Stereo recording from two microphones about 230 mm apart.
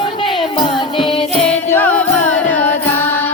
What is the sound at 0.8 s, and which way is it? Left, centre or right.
Music, left.